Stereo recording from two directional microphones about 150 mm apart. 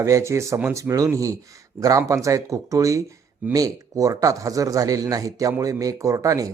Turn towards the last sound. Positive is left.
turn(degrees=-20)  # may be behind; listen again after turning